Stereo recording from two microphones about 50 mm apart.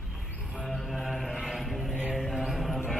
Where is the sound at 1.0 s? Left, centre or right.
Centre.